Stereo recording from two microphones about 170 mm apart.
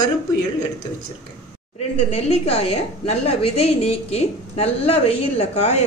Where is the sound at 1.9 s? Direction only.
35° left (ahead or behind).